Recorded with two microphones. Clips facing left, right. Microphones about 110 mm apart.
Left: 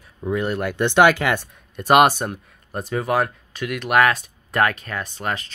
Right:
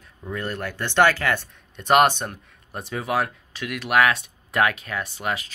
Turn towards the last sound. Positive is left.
turn(degrees=-5)  # may be behind; listen again after turning